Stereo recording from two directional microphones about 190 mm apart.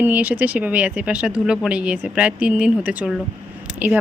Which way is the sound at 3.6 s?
5° right (ahead or behind).